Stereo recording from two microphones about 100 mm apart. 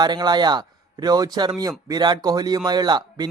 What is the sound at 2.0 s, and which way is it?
Speech, 45° right (ahead or behind).